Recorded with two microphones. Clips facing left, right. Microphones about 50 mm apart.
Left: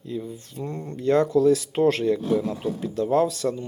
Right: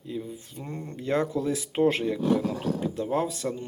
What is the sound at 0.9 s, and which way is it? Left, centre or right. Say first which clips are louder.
Speech: left 6 dB; centre.